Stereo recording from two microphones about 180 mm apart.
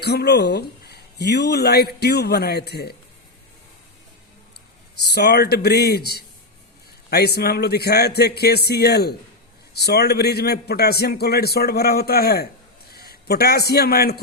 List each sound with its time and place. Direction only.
0.0 s speech: 65° left (ahead or behind)
5.0 s a man's voice: 65° left (ahead or behind)